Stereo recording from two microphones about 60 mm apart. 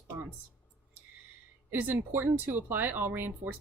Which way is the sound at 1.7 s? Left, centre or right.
Right.